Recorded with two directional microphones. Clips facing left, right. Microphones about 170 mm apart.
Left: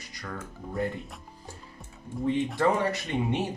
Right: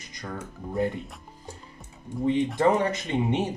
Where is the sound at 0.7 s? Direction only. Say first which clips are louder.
Right 4 dB; centre (ahead or behind).